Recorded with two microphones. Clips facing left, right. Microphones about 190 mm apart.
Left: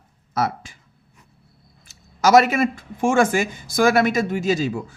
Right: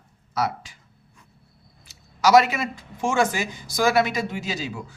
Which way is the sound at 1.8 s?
45° left (ahead or behind).